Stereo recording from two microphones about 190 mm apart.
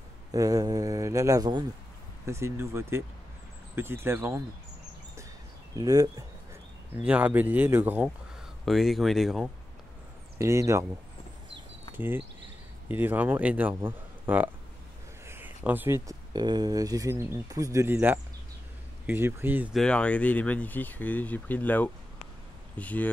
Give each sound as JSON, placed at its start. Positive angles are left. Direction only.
{"t": 0.3, "sound": "speech", "side_deg": -20}
{"t": 5.8, "sound": "speech", "side_deg": -20}
{"t": 7.0, "sound": "speech", "side_deg": -5}
{"t": 10.4, "sound": "speech", "side_deg": -15}
{"t": 12.0, "sound": "speech", "side_deg": -10}
{"t": 19.8, "sound": "speech", "side_deg": 5}